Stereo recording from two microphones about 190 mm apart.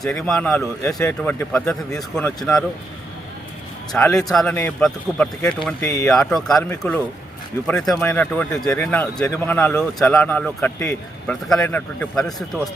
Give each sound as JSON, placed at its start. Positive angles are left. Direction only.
{"t": 0.0, "sound": "a man's voice", "side_deg": 0}
{"t": 4.2, "sound": "a man's voice", "side_deg": 0}
{"t": 5.8, "sound": "speech", "side_deg": 15}
{"t": 6.1, "sound": "a man's voice", "side_deg": 0}